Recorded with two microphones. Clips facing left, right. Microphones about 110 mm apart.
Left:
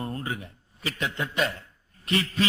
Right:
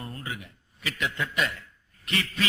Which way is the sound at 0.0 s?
30° left (ahead or behind).